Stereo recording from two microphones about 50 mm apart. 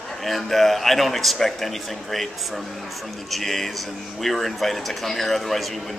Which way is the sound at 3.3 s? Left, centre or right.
Centre.